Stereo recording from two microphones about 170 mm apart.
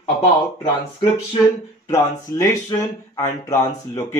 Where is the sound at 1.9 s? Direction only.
15° left (ahead or behind).